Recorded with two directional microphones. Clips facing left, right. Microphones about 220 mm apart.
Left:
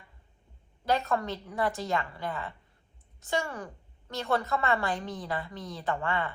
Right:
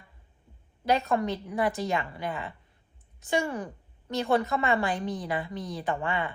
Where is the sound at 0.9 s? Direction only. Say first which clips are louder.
Right 3 dB; 20° right (ahead or behind).